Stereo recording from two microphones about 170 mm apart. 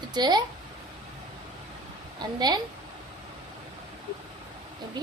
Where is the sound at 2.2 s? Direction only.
25° right (ahead or behind).